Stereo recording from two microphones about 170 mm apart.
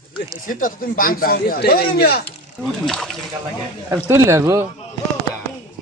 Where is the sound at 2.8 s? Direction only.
5° left (ahead or behind).